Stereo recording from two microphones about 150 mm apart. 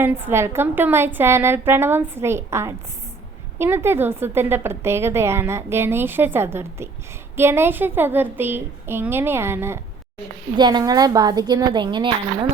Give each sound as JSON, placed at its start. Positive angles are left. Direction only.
{"t": 0.0, "sound": "a woman's voice", "side_deg": -15}
{"t": 10.6, "sound": "a woman's voice", "side_deg": -30}